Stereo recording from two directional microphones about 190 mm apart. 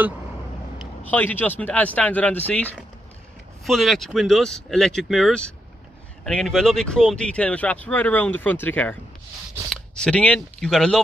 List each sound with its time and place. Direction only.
1.0 s speech: 10° left (ahead or behind)